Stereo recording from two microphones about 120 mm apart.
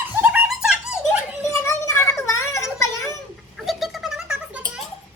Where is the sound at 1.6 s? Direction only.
25° left (ahead or behind).